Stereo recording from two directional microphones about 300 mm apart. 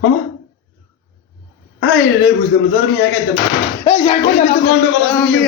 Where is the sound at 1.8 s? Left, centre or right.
Left.